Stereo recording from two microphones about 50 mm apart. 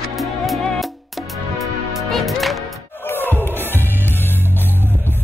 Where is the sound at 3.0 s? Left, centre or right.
Left.